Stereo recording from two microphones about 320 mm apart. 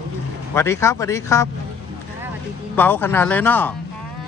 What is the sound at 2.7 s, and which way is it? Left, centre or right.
Speech, centre.